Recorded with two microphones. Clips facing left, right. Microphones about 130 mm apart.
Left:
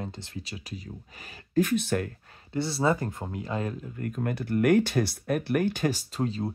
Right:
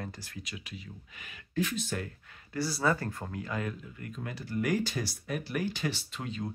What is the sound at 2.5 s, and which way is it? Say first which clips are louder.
Speech: left 4 dB; 25° left (ahead or behind).